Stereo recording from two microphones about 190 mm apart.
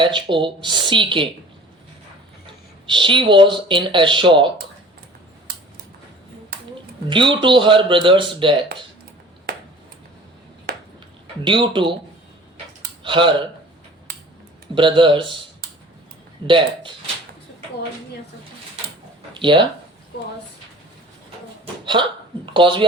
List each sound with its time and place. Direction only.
0.0 s speech: 25° right (ahead or behind)
2.8 s speech: 25° right (ahead or behind)
6.5 s a sound: 55° right (ahead or behind)
7.1 s speech: 25° right (ahead or behind)
10.7 s a sound: 50° right (ahead or behind)
11.4 s speech: 25° right (ahead or behind)
13.0 s speech: 25° right (ahead or behind)
14.8 s speech: 25° right (ahead or behind)
16.5 s speech: 25° right (ahead or behind)
19.3 s a sound: 25° right (ahead or behind)
21.6 s hiccup: 25° right (ahead or behind)
22.5 s speech: 25° right (ahead or behind)